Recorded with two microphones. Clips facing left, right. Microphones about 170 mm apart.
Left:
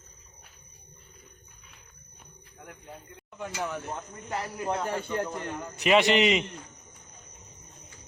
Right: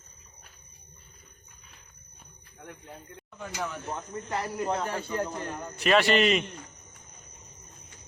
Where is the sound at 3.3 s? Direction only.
15° left (ahead or behind).